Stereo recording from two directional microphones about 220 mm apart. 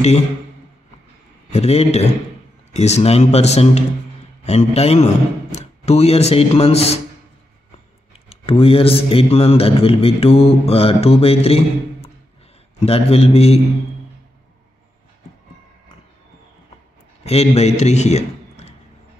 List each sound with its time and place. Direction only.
1.5 s a man's voice: 30° left (ahead or behind)
8.3 s a man's voice: 25° left (ahead or behind)
17.2 s a man's voice: 30° left (ahead or behind)